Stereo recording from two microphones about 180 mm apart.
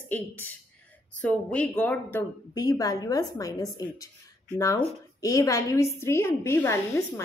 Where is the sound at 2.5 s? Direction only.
20° left (ahead or behind).